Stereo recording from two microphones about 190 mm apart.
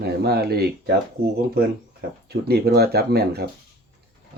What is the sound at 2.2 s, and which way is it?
Speech, 60° right (ahead or behind).